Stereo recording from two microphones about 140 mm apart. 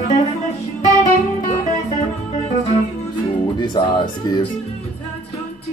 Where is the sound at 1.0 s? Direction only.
55° left (ahead or behind).